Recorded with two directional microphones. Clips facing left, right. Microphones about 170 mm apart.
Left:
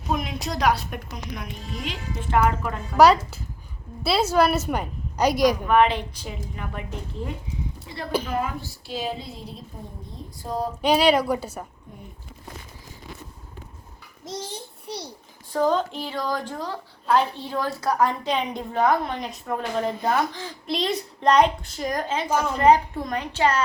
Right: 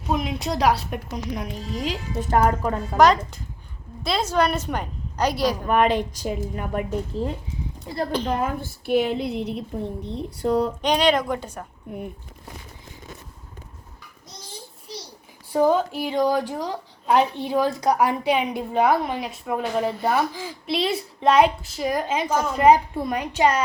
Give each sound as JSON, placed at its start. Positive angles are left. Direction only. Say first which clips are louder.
{"t": 0.1, "sound": "a woman's voice", "louder": "right 3 dB", "side_deg": -30}
{"t": 3.0, "sound": "a woman's voice", "louder": "left 1 dB", "side_deg": 5}
{"t": 5.6, "sound": "a woman's voice", "louder": "even", "side_deg": -45}
{"t": 7.1, "sound": "a woman's voice", "louder": "right 6 dB", "side_deg": -35}
{"t": 8.4, "sound": "a woman's voice", "louder": "right 2 dB", "side_deg": -50}
{"t": 10.8, "sound": "a woman's voice", "louder": "left 1 dB", "side_deg": 5}
{"t": 11.9, "sound": "a woman's voice", "louder": "right 11 dB", "side_deg": -65}
{"t": 14.9, "sound": "a sound", "louder": "left 4 dB", "side_deg": 65}
{"t": 15.5, "sound": "a woman's voice", "louder": "right 3 dB", "side_deg": -10}